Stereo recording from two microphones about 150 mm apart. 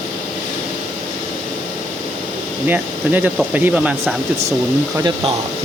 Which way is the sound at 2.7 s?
10° right (ahead or behind).